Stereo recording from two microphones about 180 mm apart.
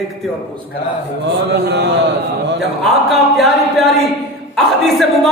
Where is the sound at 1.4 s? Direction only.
65° right (ahead or behind).